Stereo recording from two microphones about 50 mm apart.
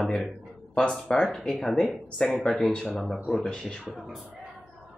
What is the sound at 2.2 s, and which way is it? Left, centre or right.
Speech, centre.